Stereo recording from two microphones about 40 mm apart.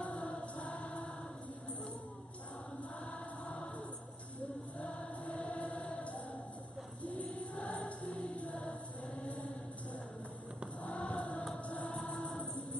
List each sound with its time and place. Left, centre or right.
0.0 s music: left
3.1 s choir: left
4.7 s choir: left
7.0 s a sound: left
7.5 s music: left
9.2 s chant: left
10.8 s music: left